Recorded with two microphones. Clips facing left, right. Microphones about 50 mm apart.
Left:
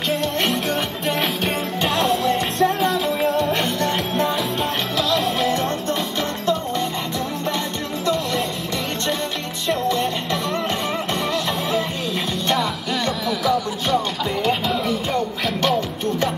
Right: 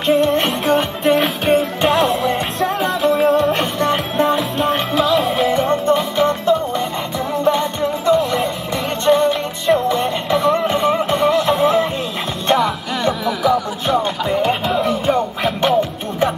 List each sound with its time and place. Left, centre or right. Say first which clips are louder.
0.1 s music: right 8 dB; centre
9.0 s music: right 10 dB; centre